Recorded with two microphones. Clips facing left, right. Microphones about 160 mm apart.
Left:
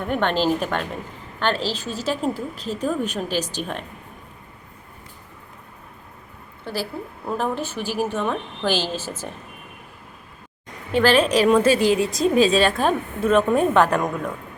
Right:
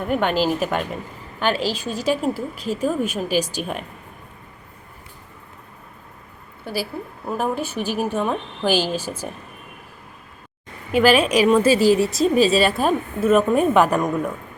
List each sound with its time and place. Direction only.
0.0 s a woman's voice: 10° right (ahead or behind)
6.7 s a woman's voice: 10° right (ahead or behind)
10.9 s a woman's voice: 10° right (ahead or behind)
11.8 s a woman's voice: 40° right (ahead or behind)
12.4 s a woman's voice: 5° right (ahead or behind)